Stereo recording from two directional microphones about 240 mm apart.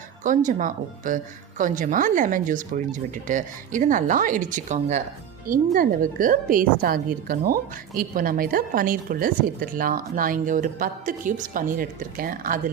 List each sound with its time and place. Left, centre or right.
0.3 s a woman's voice: right